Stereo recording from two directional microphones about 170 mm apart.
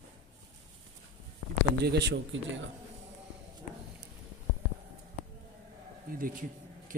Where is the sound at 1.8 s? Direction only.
85° right.